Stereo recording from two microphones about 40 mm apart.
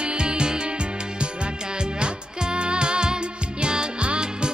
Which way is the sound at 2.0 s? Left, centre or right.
Right.